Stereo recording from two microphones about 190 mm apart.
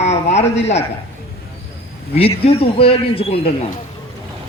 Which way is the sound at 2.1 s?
30° left (ahead or behind).